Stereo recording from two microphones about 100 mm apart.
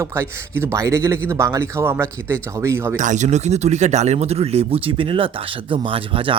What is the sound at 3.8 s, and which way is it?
Speech, 90° right.